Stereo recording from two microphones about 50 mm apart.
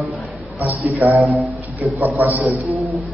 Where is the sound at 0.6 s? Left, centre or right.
Right.